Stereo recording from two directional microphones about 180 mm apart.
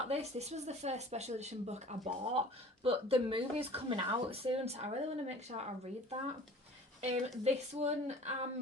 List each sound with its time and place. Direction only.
0.1 s speech: 35° right (ahead or behind)
7.4 s speech: 40° right (ahead or behind)